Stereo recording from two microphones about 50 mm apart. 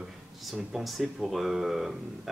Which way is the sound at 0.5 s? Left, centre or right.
Centre.